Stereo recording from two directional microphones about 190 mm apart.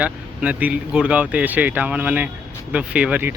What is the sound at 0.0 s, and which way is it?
Speech, 5° right (ahead or behind).